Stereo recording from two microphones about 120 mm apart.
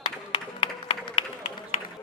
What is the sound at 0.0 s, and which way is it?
Music, 50° left (ahead or behind).